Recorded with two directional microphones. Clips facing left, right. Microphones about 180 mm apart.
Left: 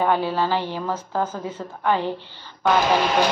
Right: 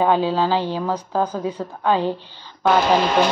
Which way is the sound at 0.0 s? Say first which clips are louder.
Right 3 dB; 15° right (ahead or behind).